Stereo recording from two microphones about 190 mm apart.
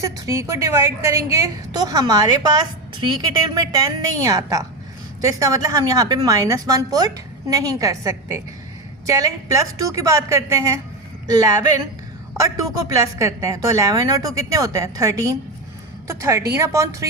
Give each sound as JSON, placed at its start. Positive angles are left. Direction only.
{"t": 0.0, "sound": "a woman's voice", "side_deg": -15}